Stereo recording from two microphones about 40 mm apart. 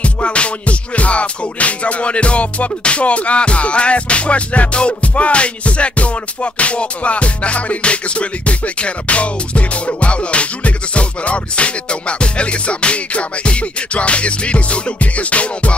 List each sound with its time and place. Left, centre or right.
0.0 s music: left